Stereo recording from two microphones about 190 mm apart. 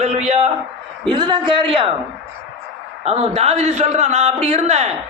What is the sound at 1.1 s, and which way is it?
Speech, 25° right (ahead or behind).